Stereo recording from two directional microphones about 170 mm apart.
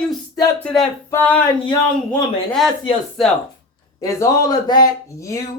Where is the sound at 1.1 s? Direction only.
10° left (ahead or behind).